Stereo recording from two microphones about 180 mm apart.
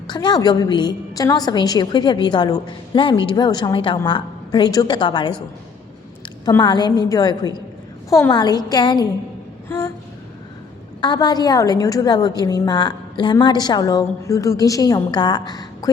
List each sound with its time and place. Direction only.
0.1 s a woman's voice: 25° left (ahead or behind)
6.4 s a woman's voice: 20° left (ahead or behind)
9.6 s a sound: 15° left (ahead or behind)
11.0 s a woman's voice: 25° left (ahead or behind)